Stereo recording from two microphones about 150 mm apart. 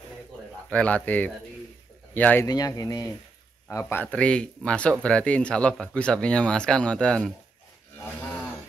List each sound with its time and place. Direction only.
0.7 s speech: 10° left (ahead or behind)
2.4 s speech: 25° left (ahead or behind)
3.6 s speech: 15° left (ahead or behind)
8.0 s livestock: 15° left (ahead or behind)